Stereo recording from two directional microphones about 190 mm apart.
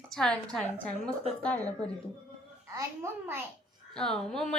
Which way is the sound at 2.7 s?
10° right (ahead or behind).